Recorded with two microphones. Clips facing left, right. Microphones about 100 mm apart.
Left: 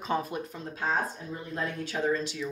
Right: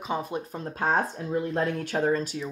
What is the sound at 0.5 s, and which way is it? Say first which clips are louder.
Speech: right 5 dB; 50° right (ahead or behind).